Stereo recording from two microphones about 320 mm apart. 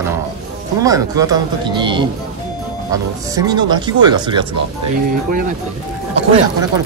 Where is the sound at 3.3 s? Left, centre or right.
Centre.